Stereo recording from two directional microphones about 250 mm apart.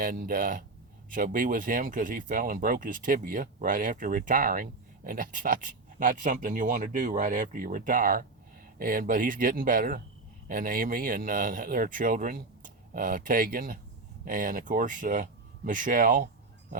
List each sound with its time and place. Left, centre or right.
0.0 s speech: right